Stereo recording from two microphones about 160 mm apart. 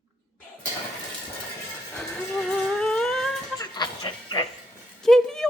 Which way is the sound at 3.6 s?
25° left (ahead or behind).